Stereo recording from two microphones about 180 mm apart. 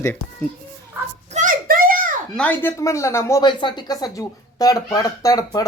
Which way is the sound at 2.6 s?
15° left (ahead or behind).